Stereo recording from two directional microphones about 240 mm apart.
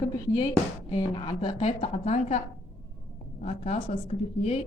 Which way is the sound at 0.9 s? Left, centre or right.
Centre.